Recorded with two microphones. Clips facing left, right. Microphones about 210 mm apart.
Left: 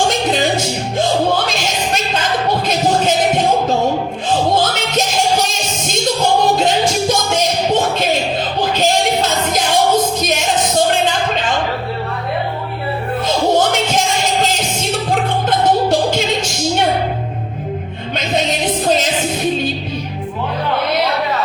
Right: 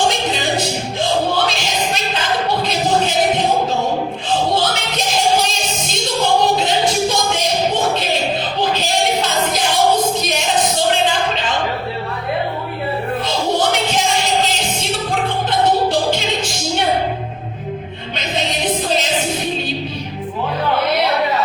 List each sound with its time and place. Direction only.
5.9 s music: 45° left (ahead or behind)
13.2 s music: 45° left (ahead or behind)